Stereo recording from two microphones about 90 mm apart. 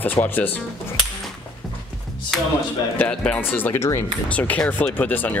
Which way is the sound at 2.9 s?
15° left (ahead or behind).